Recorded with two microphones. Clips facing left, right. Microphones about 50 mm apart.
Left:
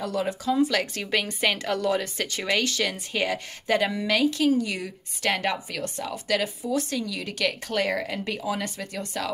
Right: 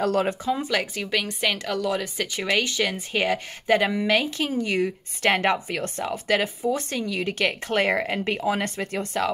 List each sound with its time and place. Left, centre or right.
0.0 s speech: right
0.5 s speech: centre
1.1 s a woman's voice: centre
2.3 s a woman's voice: centre